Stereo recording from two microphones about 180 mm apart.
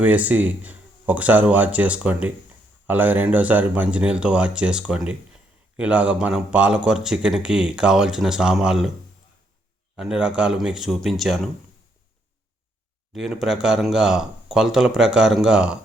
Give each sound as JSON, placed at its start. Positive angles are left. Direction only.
{"t": 0.0, "sound": "speech", "side_deg": -10}
{"t": 9.9, "sound": "speech", "side_deg": -5}
{"t": 13.1, "sound": "speech", "side_deg": 0}